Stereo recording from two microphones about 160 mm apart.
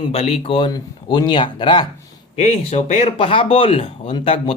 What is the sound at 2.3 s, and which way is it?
Speech, 40° left (ahead or behind).